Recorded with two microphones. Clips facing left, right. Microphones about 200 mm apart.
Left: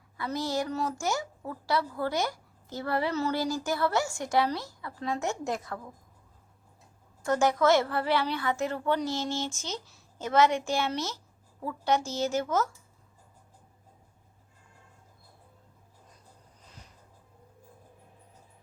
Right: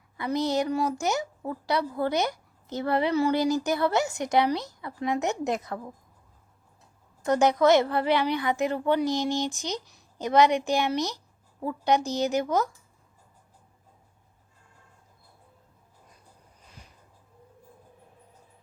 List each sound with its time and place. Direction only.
0.2 s a woman's voice: 20° right (ahead or behind)
7.3 s a woman's voice: 20° right (ahead or behind)